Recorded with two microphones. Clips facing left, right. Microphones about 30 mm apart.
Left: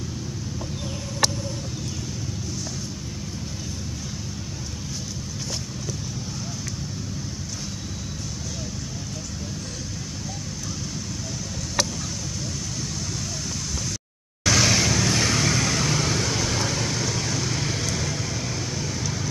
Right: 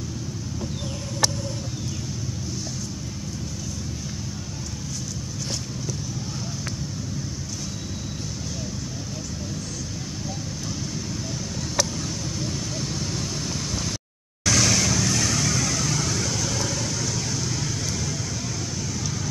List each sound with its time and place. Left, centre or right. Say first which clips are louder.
14.4 s vehicle: left 1 dB; centre